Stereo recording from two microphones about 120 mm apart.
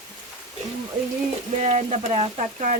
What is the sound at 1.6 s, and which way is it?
Speech, 75° right (ahead or behind).